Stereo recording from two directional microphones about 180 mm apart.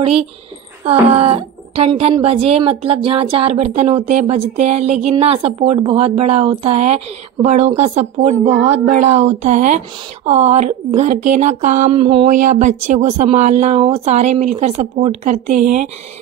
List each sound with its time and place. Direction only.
0.0 s speech: 30° right (ahead or behind)
12.3 s speech: 45° right (ahead or behind)